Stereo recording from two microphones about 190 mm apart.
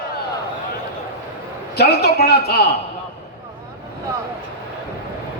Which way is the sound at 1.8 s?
60° left (ahead or behind).